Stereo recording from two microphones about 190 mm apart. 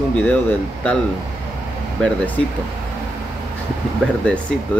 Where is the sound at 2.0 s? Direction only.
10° left (ahead or behind).